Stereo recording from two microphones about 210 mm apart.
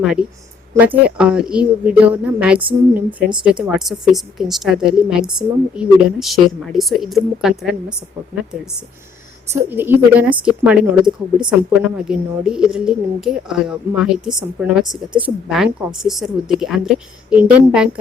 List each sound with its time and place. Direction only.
0.0 s a woman's voice: 5° right (ahead or behind)
9.5 s a woman's voice: 10° right (ahead or behind)